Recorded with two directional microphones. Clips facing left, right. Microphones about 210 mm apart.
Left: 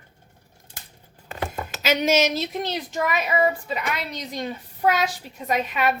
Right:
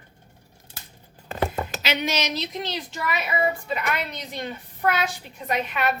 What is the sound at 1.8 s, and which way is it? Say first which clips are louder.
A woman's voice: left 8 dB; 45° left (ahead or behind).